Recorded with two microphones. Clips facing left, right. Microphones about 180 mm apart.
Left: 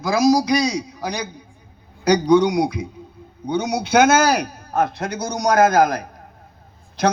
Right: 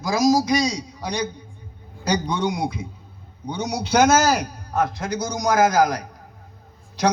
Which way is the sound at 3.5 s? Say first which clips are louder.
Left 3 dB; 60° left (ahead or behind).